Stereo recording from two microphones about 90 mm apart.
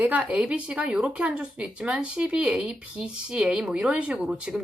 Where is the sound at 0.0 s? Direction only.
20° right (ahead or behind).